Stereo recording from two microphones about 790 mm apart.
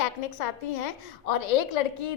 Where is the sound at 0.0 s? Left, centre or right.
Left.